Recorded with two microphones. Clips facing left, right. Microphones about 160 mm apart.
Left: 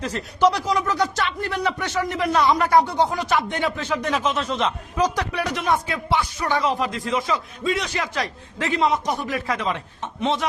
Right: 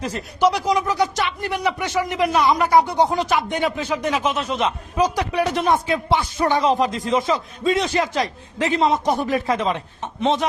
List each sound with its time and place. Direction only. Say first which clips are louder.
0.0 s speech: even; 10° right (ahead or behind)
5.4 s speech: right 4 dB; 30° right (ahead or behind)